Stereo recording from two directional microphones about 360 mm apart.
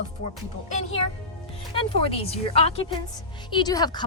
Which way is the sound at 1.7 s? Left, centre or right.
Centre.